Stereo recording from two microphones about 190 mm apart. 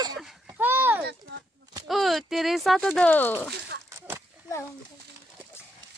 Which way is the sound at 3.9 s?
15° right (ahead or behind).